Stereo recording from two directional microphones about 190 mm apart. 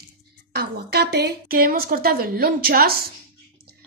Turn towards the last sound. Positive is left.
turn(degrees=-50)  # may be behind; listen again after turning